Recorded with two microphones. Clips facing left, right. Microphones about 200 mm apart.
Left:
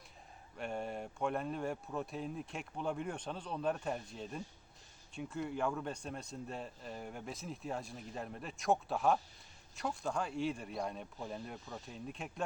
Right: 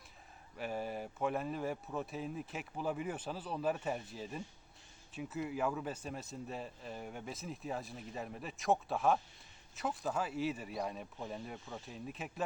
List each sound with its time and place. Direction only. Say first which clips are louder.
0.5 s speech: right 1 dB; 5° right (ahead or behind)